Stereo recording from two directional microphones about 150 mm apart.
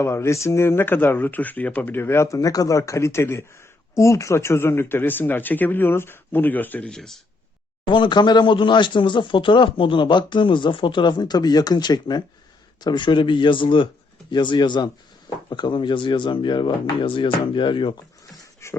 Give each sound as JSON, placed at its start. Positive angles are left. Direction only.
{"t": 0.0, "sound": "speech", "side_deg": 20}
{"t": 7.9, "sound": "speech", "side_deg": 30}
{"t": 18.6, "sound": "a sound", "side_deg": 20}